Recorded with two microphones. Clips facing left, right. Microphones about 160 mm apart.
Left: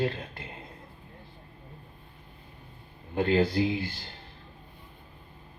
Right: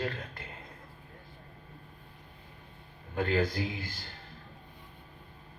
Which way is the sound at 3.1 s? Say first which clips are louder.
Left 5 dB; 25° left (ahead or behind).